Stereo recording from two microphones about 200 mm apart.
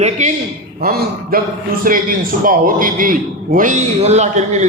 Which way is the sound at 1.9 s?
45° right (ahead or behind).